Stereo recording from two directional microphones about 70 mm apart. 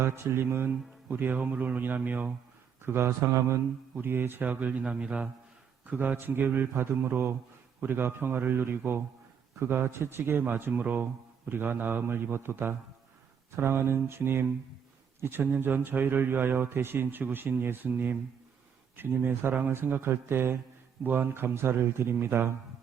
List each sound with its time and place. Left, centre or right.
0.0 s speech: right